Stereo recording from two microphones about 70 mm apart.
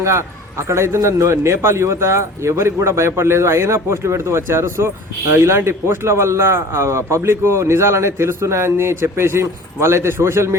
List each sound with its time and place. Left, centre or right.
0.0 s a man's voice: right